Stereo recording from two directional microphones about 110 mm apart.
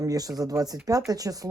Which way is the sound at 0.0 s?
35° right (ahead or behind).